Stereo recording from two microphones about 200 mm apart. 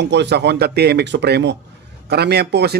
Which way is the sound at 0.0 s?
60° right (ahead or behind).